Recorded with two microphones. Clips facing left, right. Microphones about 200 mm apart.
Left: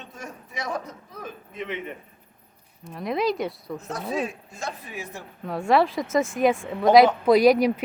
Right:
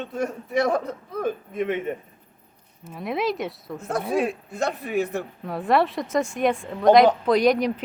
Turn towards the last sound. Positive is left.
turn(degrees=5)  # may be behind; listen again after turning